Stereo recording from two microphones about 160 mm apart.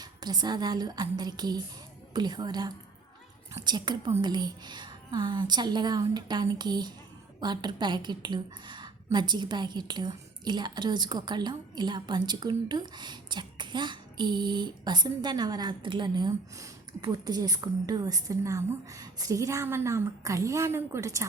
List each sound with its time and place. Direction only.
0.0 s a woman's voice: 25° right (ahead or behind)